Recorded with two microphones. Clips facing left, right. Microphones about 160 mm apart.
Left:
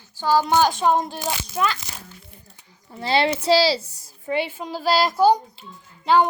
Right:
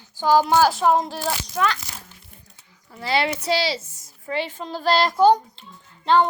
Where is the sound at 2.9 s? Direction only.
25° left (ahead or behind).